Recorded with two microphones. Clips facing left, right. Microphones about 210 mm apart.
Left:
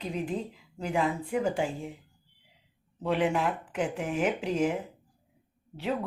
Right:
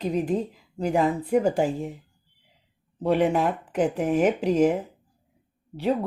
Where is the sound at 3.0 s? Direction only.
45° right (ahead or behind).